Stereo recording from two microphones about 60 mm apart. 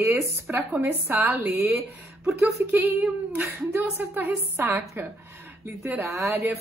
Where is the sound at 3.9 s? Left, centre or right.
Right.